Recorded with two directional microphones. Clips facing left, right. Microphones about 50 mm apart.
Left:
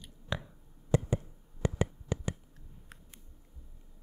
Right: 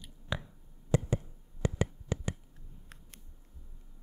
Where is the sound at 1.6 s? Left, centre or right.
Centre.